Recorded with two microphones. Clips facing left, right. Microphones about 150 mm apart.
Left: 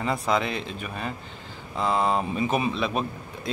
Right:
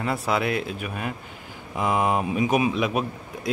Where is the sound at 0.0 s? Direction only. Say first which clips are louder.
Even; 5° right (ahead or behind).